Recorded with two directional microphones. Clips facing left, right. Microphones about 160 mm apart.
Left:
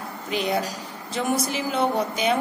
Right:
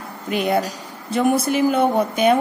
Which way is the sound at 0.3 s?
55° right (ahead or behind).